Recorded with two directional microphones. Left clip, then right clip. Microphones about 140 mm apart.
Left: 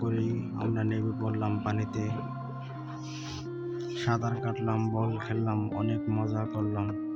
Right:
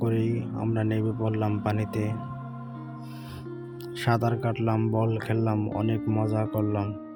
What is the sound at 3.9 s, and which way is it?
Speech, 45° right (ahead or behind).